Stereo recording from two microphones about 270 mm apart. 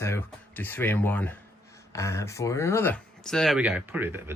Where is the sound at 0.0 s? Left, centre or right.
Centre.